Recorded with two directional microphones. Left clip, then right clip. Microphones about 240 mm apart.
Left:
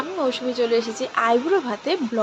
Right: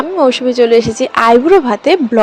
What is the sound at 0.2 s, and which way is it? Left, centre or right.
A woman's voice, right.